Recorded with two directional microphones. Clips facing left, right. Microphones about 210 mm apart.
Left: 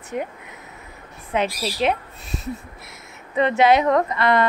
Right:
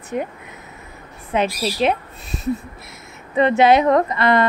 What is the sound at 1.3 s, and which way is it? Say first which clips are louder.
Speech: right 3 dB; 30° right (ahead or behind).